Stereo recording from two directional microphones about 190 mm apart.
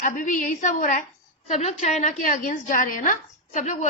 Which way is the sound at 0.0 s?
45° left (ahead or behind).